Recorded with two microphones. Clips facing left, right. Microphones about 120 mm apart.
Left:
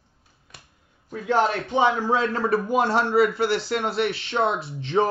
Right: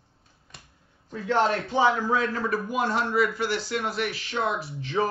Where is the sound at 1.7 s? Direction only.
25° left (ahead or behind).